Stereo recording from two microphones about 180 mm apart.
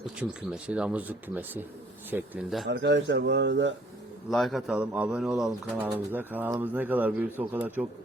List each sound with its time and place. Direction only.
0.0 s speech: 5° right (ahead or behind)
2.6 s speech: 70° right (ahead or behind)
4.3 s speech: centre (ahead or behind)